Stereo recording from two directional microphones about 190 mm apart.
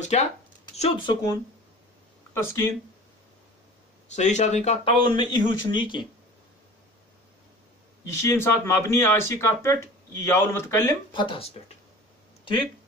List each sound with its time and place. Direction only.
0.0 s speech: 40° left (ahead or behind)
2.3 s speech: 15° left (ahead or behind)
4.1 s speech: 40° left (ahead or behind)
5.0 s speech: 25° left (ahead or behind)
8.2 s speech: 15° left (ahead or behind)